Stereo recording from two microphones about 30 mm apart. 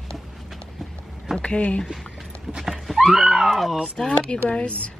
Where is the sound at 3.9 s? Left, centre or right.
Left.